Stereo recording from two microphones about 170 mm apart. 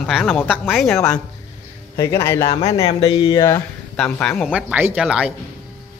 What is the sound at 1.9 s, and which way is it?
Speech, 15° left (ahead or behind).